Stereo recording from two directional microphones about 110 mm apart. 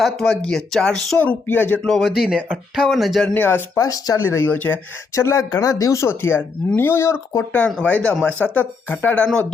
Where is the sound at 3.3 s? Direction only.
20° left (ahead or behind).